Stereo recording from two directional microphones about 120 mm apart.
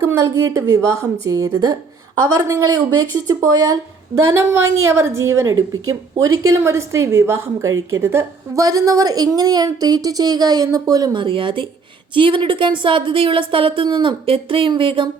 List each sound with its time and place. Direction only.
0.0 s speech: 25° right (ahead or behind)
6.6 s a woman's voice: 25° right (ahead or behind); by 15.1 s 45° right (ahead or behind)